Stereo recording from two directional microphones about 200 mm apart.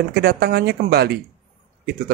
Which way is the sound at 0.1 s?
50° right (ahead or behind).